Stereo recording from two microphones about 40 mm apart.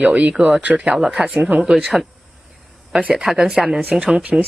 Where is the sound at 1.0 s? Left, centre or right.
Centre.